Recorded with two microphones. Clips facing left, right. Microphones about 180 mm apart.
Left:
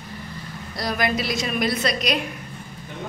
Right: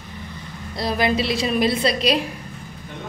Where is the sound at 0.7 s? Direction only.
30° right (ahead or behind).